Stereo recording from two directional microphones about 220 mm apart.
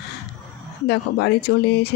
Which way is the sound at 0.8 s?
50° left (ahead or behind).